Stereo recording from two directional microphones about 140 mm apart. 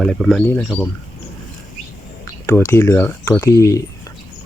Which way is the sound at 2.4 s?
15° left (ahead or behind).